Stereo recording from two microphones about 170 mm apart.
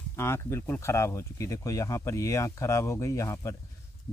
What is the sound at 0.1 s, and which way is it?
Speech, 15° left (ahead or behind).